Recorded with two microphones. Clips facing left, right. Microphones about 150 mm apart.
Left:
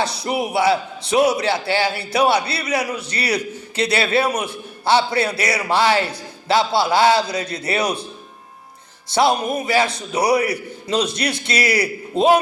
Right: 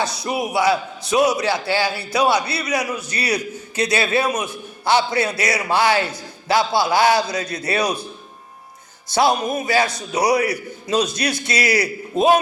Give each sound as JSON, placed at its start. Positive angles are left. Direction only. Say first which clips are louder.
{"t": 0.0, "sound": "a man's voice", "louder": "left 1 dB", "side_deg": 30}
{"t": 9.1, "sound": "a man's voice", "louder": "even", "side_deg": 30}